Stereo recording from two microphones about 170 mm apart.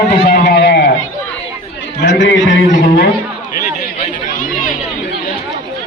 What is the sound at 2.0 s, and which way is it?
Speech, 90° left.